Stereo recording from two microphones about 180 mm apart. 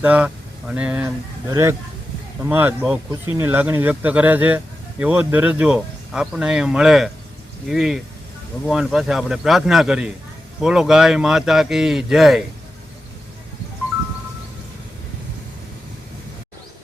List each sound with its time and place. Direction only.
0.0 s speech: 10° right (ahead or behind)